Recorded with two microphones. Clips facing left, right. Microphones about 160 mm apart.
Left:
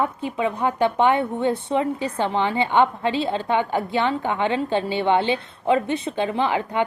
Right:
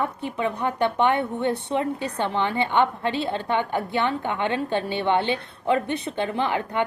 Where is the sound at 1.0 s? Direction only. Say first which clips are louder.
Left 2 dB; 60° right (ahead or behind).